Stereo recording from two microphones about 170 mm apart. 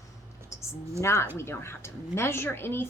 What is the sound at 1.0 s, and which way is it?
Speech, 15° left (ahead or behind).